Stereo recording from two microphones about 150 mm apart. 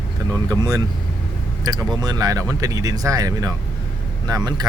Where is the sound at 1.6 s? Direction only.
25° right (ahead or behind).